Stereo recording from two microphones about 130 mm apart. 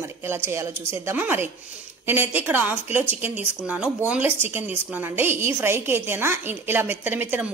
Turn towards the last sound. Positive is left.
turn(degrees=-15)  # may be behind; listen again after turning